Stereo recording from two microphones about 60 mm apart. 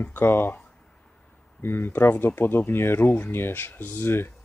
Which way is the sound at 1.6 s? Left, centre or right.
Left.